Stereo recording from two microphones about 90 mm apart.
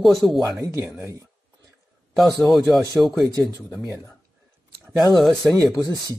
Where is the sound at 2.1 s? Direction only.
Centre (ahead or behind).